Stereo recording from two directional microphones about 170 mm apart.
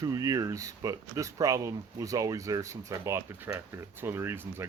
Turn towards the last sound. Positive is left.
turn(degrees=-15)  # may be behind; listen again after turning